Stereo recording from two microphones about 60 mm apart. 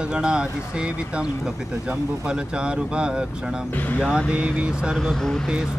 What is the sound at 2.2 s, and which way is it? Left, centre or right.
Speech, centre.